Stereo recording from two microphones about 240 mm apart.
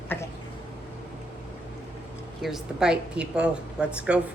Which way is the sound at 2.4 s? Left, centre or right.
Centre.